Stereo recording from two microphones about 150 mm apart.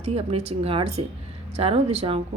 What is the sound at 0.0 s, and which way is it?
A woman's voice, 45° right (ahead or behind).